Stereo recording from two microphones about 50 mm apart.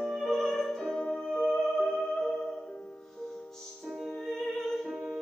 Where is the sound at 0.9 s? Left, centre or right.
Centre.